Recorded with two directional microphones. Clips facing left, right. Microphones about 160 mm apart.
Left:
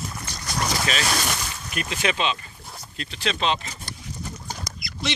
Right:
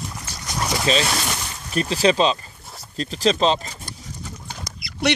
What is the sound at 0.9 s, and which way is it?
Speech, 30° right (ahead or behind).